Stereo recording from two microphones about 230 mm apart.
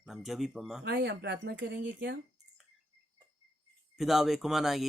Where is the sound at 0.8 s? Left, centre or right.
Right.